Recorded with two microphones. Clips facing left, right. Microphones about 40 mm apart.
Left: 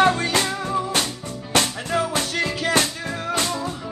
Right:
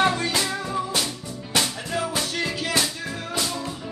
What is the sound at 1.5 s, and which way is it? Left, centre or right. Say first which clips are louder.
Music: left 4 dB; left.